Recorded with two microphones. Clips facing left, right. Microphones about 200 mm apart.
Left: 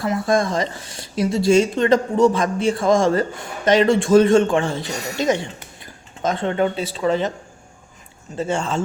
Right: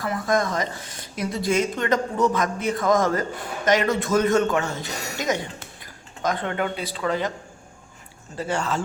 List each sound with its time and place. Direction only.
0.0 s a woman's voice: 30° left (ahead or behind)
8.4 s a woman's voice: 25° left (ahead or behind)